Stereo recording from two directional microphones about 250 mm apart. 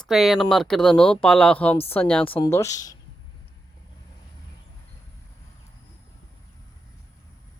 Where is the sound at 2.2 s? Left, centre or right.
Left.